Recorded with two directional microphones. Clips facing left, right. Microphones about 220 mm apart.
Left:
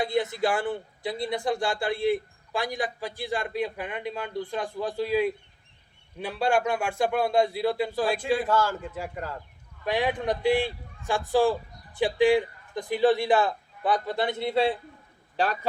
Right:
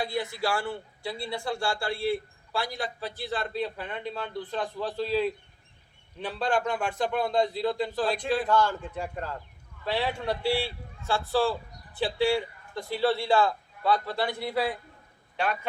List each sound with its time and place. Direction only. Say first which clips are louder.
0.0 s a man's voice: left 4 dB; 20° left (ahead or behind)